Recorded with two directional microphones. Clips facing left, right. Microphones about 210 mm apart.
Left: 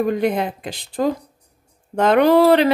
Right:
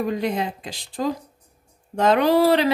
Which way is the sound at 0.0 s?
55° left (ahead or behind).